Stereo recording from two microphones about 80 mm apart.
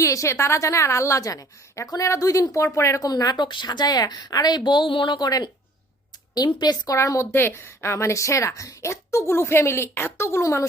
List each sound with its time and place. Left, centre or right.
0.0 s a woman's voice: left
3.0 s a woman's voice: left
6.3 s a woman's voice: left
6.9 s a woman's voice: left